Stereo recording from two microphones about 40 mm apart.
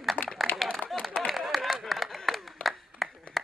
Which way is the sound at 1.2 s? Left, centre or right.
Centre.